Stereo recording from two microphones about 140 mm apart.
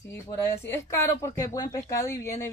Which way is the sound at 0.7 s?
20° left (ahead or behind).